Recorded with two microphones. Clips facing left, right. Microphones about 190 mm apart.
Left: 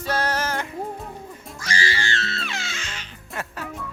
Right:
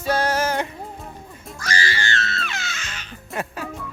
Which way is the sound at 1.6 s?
30° left (ahead or behind).